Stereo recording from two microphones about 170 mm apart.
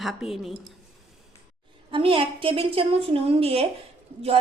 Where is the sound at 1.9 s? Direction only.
30° right (ahead or behind).